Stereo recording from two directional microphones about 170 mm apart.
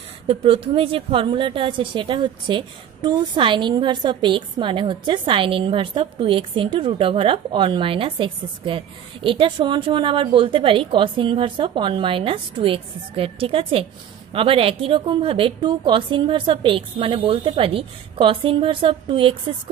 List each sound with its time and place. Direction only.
0.3 s a woman's voice: 35° right (ahead or behind)